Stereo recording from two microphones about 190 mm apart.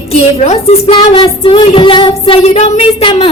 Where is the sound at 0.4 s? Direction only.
35° left (ahead or behind).